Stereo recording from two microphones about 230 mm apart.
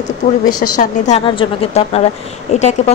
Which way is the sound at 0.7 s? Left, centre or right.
Left.